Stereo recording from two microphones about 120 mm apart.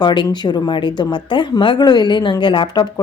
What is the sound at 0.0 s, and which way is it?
Speech, 40° left (ahead or behind).